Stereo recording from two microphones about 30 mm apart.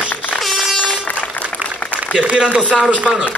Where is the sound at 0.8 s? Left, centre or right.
Left.